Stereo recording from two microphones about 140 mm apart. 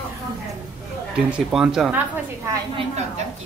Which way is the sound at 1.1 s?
5° right (ahead or behind).